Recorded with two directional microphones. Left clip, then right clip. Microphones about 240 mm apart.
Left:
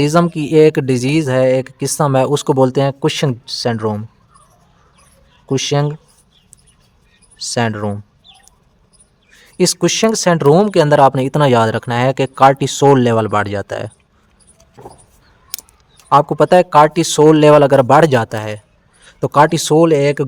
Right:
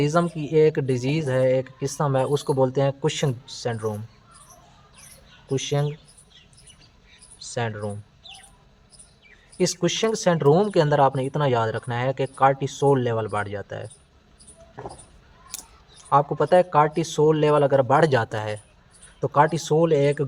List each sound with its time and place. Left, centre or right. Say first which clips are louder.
0.0 s speech: left 9 dB; left
5.5 s speech: left 9 dB; left
7.5 s speech: left 10 dB; left
9.6 s speech: left 9 dB; left
16.0 s speech: left 9 dB; left